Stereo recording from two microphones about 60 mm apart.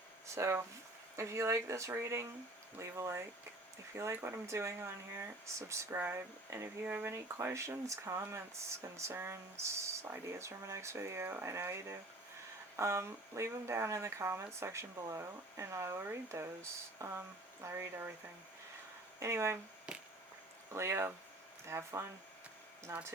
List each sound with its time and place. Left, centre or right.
0.3 s speech: right
4.1 s speech: right
4.4 s speech: right
19.2 s speech: right
19.9 s a sound: centre
20.7 s speech: right